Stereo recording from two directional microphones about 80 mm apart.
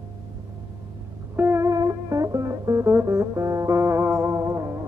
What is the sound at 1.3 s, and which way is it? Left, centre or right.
Music, right.